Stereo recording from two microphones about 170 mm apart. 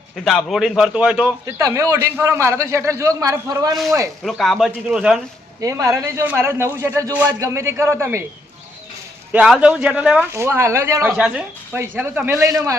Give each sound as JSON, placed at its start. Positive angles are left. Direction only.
{"t": 0.3, "sound": "a man's voice", "side_deg": 5}
{"t": 1.5, "sound": "a man's voice", "side_deg": -15}
{"t": 4.2, "sound": "a man's voice", "side_deg": 0}
{"t": 5.5, "sound": "a man's voice", "side_deg": -20}
{"t": 9.3, "sound": "a man's voice", "side_deg": -5}